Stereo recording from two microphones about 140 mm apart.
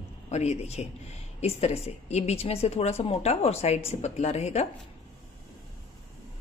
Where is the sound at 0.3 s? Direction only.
50° left (ahead or behind).